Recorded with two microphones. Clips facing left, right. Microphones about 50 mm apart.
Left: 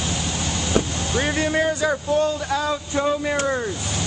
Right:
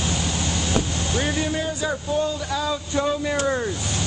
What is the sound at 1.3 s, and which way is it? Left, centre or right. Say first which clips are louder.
Speech: left 4 dB; left.